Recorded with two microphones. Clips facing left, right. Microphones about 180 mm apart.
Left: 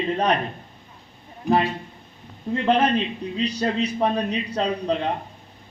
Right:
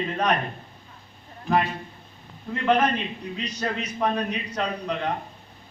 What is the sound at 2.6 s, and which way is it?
A man's voice, 30° left (ahead or behind).